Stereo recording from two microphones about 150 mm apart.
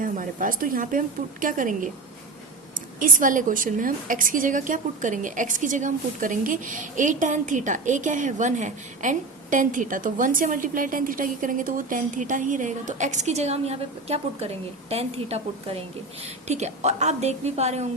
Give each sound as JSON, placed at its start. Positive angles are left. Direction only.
{"t": 0.0, "sound": "a woman's voice", "side_deg": -60}
{"t": 3.0, "sound": "a woman's voice", "side_deg": -60}